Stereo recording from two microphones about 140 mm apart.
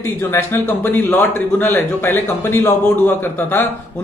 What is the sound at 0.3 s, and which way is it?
Speech, 15° left (ahead or behind).